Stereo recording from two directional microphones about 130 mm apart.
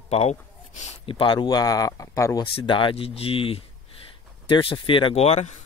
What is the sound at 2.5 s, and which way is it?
Speech, 40° left (ahead or behind).